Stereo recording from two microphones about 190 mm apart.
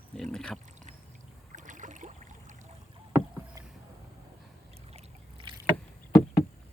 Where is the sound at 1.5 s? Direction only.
40° right (ahead or behind).